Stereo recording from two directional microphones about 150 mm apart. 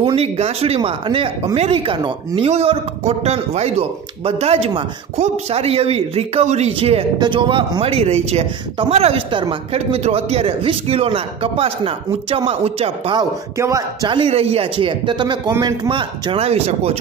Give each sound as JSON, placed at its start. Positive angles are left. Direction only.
{"t": 0.0, "sound": "speech", "side_deg": -45}
{"t": 13.6, "sound": "speech", "side_deg": -20}
{"t": 14.0, "sound": "speech", "side_deg": -35}